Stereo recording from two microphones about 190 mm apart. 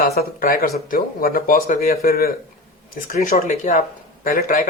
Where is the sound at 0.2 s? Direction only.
50° left (ahead or behind).